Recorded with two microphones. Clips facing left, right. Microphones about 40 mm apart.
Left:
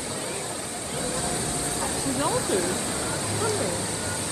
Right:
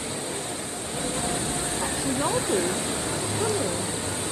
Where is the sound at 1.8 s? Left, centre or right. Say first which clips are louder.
Even; right.